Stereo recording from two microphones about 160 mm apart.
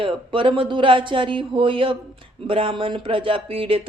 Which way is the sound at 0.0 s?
30° right (ahead or behind).